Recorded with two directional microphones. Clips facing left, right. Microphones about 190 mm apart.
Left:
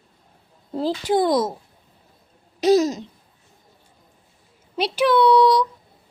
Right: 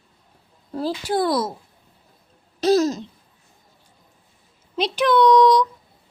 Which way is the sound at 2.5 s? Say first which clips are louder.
Left 1 dB; 15° left (ahead or behind).